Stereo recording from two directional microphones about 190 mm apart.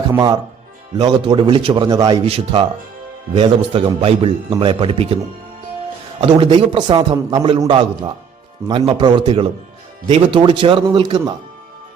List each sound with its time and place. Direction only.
0.1 s a man's voice: 20° right (ahead or behind)
2.2 s a man's voice: 30° right (ahead or behind)